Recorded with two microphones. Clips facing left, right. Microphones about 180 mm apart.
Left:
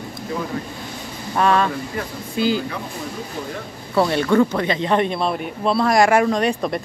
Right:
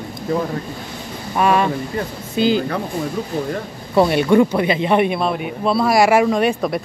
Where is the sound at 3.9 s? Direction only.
15° right (ahead or behind).